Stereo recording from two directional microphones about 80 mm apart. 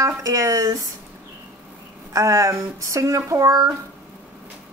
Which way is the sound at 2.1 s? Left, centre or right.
Right.